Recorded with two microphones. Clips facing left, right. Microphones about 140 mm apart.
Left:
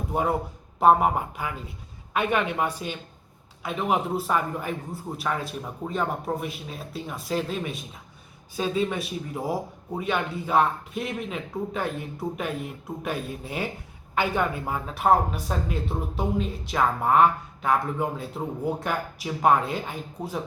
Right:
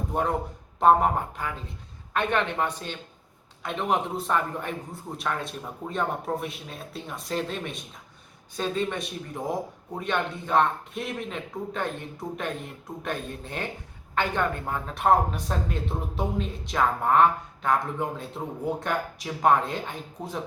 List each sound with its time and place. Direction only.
0.1 s speech: 10° left (ahead or behind)